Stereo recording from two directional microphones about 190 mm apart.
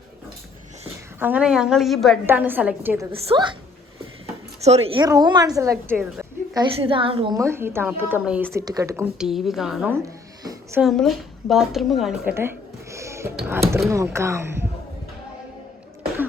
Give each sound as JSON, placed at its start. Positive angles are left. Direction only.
{"t": 1.2, "sound": "a woman's voice", "side_deg": -5}
{"t": 2.2, "sound": "speech", "side_deg": -10}
{"t": 3.1, "sound": "a woman's voice", "side_deg": -25}
{"t": 4.6, "sound": "a woman's voice", "side_deg": -35}
{"t": 5.0, "sound": "a woman's voice", "side_deg": -20}
{"t": 5.9, "sound": "a sound", "side_deg": -10}
{"t": 6.7, "sound": "a woman's voice", "side_deg": -30}
{"t": 7.3, "sound": "speech", "side_deg": -15}
{"t": 9.1, "sound": "a woman's voice", "side_deg": 0}
{"t": 12.3, "sound": "a sound", "side_deg": -15}
{"t": 13.9, "sound": "speech", "side_deg": -15}